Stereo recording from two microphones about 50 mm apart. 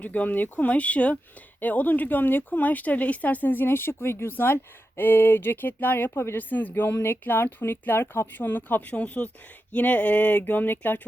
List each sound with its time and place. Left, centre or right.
0.0 s speech: left
4.4 s speech: left
9.7 s a sound: left
10.4 s speech: left